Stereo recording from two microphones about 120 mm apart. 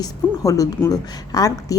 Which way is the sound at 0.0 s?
30° left (ahead or behind).